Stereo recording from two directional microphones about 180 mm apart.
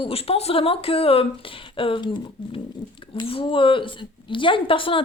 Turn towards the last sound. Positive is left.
turn(degrees=30)  # may be behind; listen again after turning